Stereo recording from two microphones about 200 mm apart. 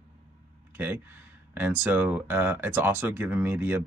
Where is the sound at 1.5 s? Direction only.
10° right (ahead or behind).